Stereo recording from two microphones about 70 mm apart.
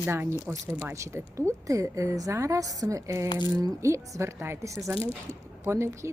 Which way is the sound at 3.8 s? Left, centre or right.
Right.